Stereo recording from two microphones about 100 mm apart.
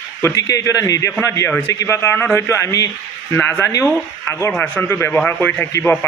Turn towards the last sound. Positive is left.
turn(degrees=20)  # may be behind; listen again after turning